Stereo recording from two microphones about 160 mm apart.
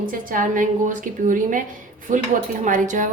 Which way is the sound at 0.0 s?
60° right (ahead or behind).